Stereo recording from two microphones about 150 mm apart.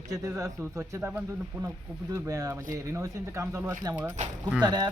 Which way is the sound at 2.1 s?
20° right (ahead or behind).